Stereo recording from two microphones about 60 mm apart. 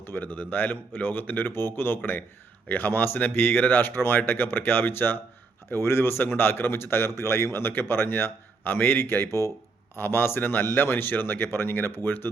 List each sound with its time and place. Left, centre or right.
0.0 s a man's voice: left